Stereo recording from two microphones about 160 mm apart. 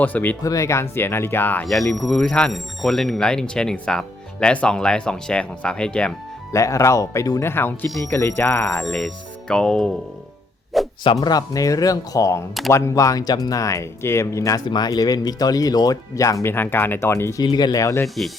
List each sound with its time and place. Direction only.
0.0 s speech: 10° left (ahead or behind)
1.9 s speech: centre (ahead or behind)
6.5 s speech: 20° left (ahead or behind)
8.8 s speech: centre (ahead or behind)
11.0 s speech: 30° left (ahead or behind)
17.4 s speech: 25° left (ahead or behind)